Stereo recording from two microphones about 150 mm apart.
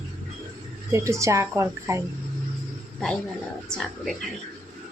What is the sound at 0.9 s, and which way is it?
A woman's voice, 20° right (ahead or behind).